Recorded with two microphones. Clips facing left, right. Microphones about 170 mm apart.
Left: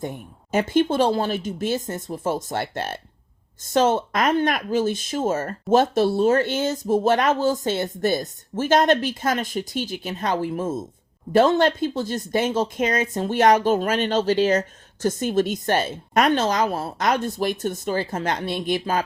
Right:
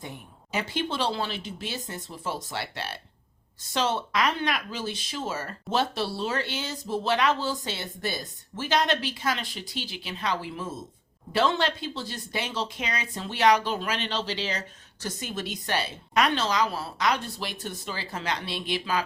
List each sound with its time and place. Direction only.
0.0 s speech: 50° left (ahead or behind)